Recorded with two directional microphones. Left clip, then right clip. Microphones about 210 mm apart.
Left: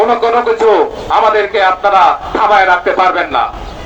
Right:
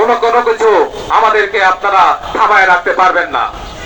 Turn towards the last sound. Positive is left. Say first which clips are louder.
# even
turn(degrees=45)  # may be behind; listen again after turning